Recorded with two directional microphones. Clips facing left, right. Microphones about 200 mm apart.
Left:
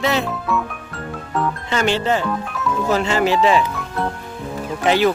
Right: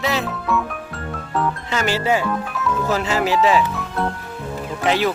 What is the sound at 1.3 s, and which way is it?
Music, centre (ahead or behind).